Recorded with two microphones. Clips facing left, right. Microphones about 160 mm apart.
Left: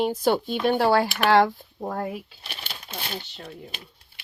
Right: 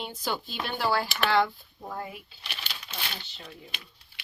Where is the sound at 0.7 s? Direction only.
65° left (ahead or behind).